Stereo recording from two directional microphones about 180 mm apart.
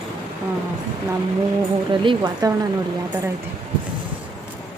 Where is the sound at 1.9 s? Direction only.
25° right (ahead or behind).